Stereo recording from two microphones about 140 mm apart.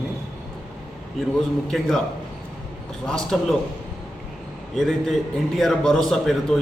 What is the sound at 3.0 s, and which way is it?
Speech, 5° left (ahead or behind).